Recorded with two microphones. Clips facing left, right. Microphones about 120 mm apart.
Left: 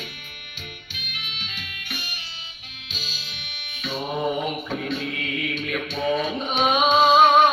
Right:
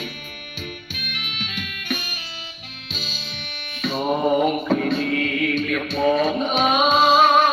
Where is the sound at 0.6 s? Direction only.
60° right (ahead or behind).